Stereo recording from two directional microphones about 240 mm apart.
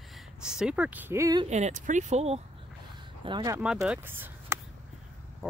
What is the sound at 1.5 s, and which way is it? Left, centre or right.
Speech, right.